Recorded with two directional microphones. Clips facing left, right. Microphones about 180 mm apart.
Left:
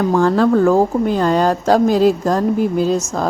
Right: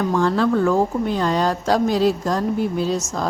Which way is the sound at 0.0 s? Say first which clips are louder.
Left 5 dB; 45° left (ahead or behind).